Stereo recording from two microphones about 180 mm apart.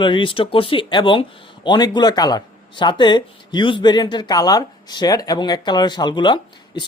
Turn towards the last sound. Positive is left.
turn(degrees=25)  # may be behind; listen again after turning